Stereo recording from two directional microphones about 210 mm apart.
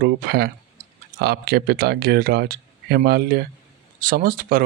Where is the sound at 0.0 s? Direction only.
50° right (ahead or behind).